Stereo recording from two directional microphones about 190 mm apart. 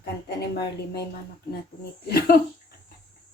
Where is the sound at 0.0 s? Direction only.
55° left (ahead or behind).